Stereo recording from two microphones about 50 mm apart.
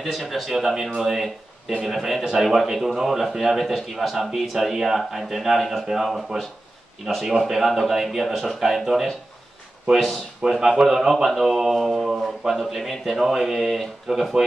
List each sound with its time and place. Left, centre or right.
0.0 s a man's voice: centre